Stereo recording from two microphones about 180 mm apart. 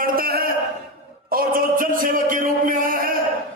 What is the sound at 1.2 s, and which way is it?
A man's voice, 50° right (ahead or behind).